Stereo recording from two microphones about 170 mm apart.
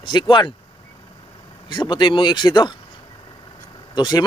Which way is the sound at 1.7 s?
25° left (ahead or behind).